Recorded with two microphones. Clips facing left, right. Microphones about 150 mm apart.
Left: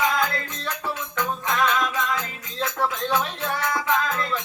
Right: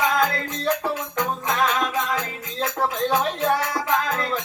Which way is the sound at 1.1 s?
40° right (ahead or behind).